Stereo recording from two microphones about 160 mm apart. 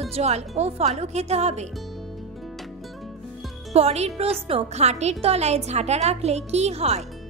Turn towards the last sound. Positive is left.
turn(degrees=-40)  # may be behind; listen again after turning